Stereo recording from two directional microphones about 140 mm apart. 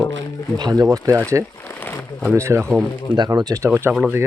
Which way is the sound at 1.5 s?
15° left (ahead or behind).